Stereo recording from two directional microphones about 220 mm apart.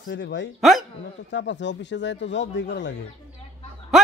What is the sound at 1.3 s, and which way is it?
Speech, 55° left (ahead or behind).